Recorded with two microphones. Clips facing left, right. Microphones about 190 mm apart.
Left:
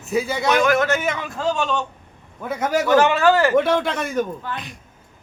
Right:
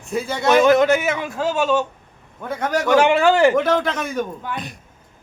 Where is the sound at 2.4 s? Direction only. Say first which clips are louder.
Left 1 dB; 5° left (ahead or behind).